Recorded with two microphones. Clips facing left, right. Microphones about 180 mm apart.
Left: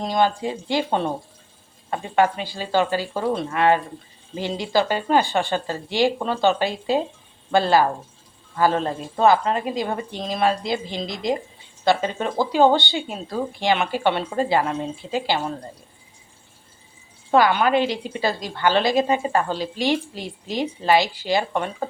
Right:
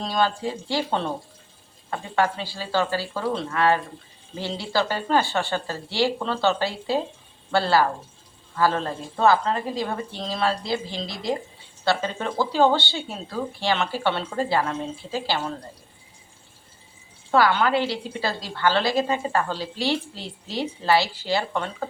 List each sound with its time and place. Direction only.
0.0 s a woman's voice: 15° left (ahead or behind)
17.3 s a woman's voice: 15° left (ahead or behind)